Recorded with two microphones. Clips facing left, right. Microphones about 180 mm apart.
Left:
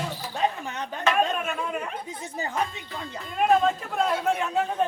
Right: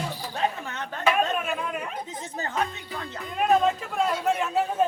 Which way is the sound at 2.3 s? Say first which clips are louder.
Even; 10° left (ahead or behind).